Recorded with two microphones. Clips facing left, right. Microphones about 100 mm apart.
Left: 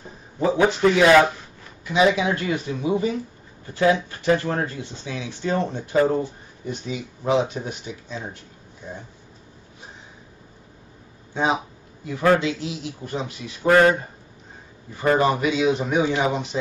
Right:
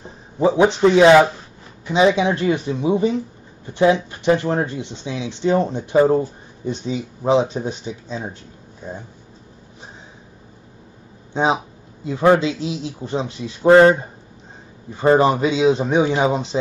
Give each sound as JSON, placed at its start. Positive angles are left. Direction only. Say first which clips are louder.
{"t": 0.4, "sound": "speech", "louder": "right 4 dB", "side_deg": -20}
{"t": 8.8, "sound": "speech", "louder": "right 4 dB", "side_deg": -40}
{"t": 11.3, "sound": "speech", "louder": "right 4 dB", "side_deg": -25}
{"t": 15.0, "sound": "speech", "louder": "right 5 dB", "side_deg": -25}